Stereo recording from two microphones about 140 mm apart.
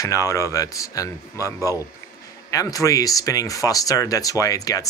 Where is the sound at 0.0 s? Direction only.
20° left (ahead or behind).